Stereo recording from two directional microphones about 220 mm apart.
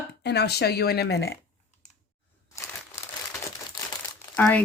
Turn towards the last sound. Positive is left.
turn(degrees=5)  # may be behind; listen again after turning